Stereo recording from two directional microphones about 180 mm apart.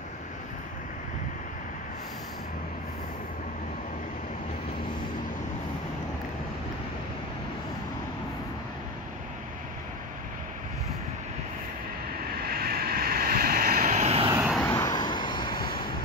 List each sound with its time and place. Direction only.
12.4 s vehicle: 55° right (ahead or behind); by 14.3 s 35° right (ahead or behind)
14.5 s vehicle: 10° left (ahead or behind)